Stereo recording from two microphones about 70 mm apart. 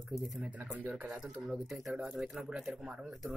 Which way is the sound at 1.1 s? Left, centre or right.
Centre.